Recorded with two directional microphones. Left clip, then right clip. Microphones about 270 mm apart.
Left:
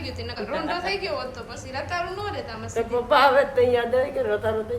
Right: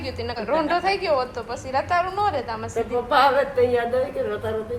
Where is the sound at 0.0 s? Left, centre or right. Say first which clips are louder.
Right 4 dB; centre.